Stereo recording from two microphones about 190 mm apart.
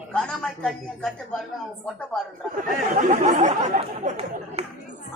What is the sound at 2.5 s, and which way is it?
Chatter, 45° right (ahead or behind).